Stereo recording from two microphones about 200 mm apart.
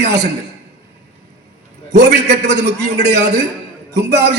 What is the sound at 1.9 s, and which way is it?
A man's voice, 55° right (ahead or behind).